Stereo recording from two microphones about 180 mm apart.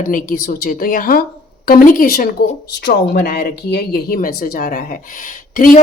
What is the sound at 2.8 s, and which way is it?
Speech, 65° left (ahead or behind).